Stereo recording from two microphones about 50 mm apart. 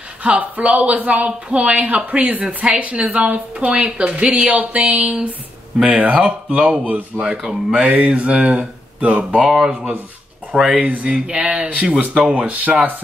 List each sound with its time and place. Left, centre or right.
0.2 s speech: right